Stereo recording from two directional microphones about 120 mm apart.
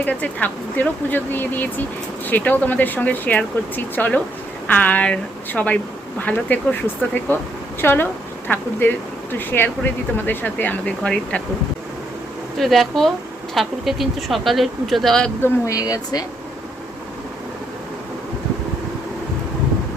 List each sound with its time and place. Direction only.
0.0 s speech: 10° left (ahead or behind)
12.5 s speech: centre (ahead or behind)
15.4 s speech: 20° left (ahead or behind)